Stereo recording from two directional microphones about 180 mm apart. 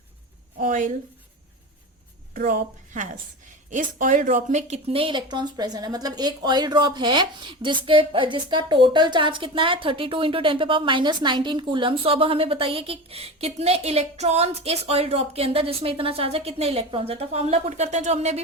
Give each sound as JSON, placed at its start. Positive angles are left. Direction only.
{"t": 0.6, "sound": "a woman's voice", "side_deg": -50}
{"t": 2.3, "sound": "a woman's voice", "side_deg": -50}